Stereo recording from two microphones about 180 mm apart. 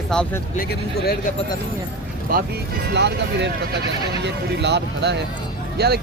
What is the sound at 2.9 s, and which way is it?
Speech, 75° right (ahead or behind).